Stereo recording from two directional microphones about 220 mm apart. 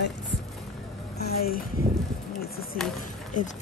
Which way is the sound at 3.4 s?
35° left (ahead or behind).